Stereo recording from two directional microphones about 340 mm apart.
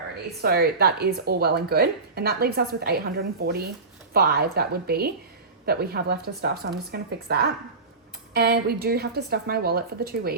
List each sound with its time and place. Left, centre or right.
0.4 s speech: right